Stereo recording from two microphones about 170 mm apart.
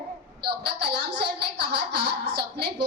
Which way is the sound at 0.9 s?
75° right (ahead or behind).